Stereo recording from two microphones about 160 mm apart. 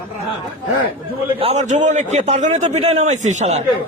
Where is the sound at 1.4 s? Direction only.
45° right (ahead or behind).